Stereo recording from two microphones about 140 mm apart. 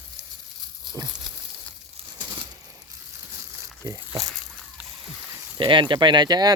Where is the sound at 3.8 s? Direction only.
25° right (ahead or behind).